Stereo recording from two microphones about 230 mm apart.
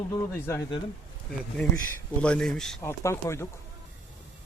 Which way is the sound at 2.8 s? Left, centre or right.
Centre.